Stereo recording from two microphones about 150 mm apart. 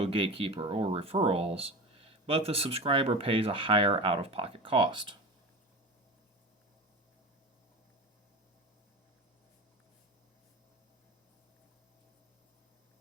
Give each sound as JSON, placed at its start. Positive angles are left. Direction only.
{"t": 0.0, "sound": "speech", "side_deg": -35}